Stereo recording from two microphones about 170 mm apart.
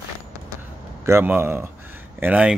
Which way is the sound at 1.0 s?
15° right (ahead or behind).